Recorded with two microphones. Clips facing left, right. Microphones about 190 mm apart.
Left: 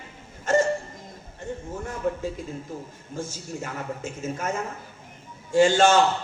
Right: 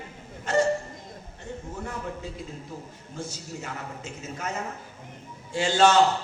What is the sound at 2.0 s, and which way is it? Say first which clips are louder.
Speech: left 9 dB; 50° left (ahead or behind).